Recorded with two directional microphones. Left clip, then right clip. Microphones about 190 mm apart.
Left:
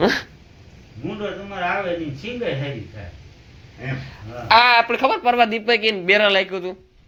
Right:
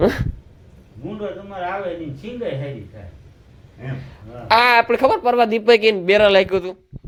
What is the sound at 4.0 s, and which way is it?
A man's voice, 40° right (ahead or behind).